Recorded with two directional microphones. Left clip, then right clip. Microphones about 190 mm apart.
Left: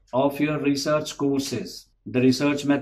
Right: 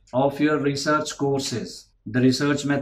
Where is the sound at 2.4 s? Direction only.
15° left (ahead or behind).